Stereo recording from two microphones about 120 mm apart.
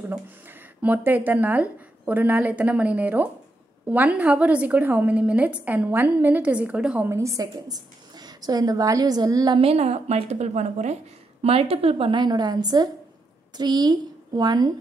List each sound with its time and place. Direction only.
0.1 s a woman's voice: 15° right (ahead or behind)
7.1 s a woman's voice: 25° right (ahead or behind)
9.6 s a woman's voice: 60° right (ahead or behind); by 11.0 s 75° right (ahead or behind)
11.4 s a woman's voice: 55° right (ahead or behind); by 14.7 s 35° right (ahead or behind)